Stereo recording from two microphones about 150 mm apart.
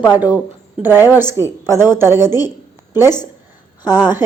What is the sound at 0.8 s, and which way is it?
A woman's voice, 15° right (ahead or behind).